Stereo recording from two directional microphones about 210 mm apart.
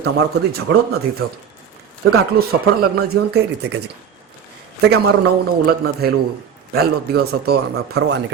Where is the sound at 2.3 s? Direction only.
50° right (ahead or behind).